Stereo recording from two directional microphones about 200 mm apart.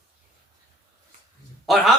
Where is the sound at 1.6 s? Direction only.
Centre (ahead or behind).